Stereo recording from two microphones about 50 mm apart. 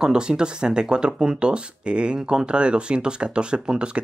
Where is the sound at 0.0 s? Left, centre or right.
Centre.